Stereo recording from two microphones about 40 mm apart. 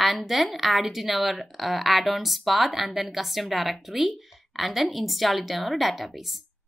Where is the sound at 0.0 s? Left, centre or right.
Centre.